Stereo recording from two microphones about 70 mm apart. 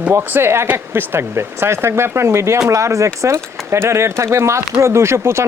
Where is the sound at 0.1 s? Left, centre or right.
Right.